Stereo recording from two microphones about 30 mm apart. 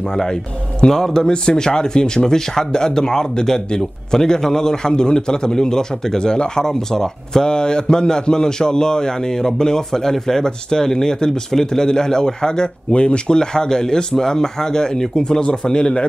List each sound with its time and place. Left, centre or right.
0.1 s speech: left
6.7 s speech: centre
7.4 s speech: left
12.9 s speech: left